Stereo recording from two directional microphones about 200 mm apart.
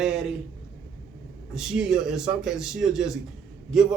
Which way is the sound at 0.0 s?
5° right (ahead or behind).